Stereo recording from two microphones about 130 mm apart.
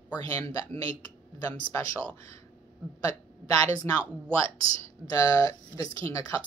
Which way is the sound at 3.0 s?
25° left (ahead or behind).